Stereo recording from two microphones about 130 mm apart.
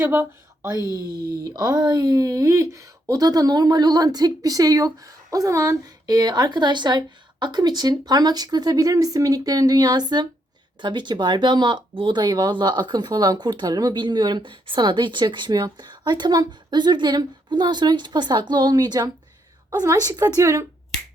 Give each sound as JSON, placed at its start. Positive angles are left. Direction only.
{"t": 0.0, "sound": "speech", "side_deg": -15}
{"t": 1.5, "sound": "a woman's voice", "side_deg": -30}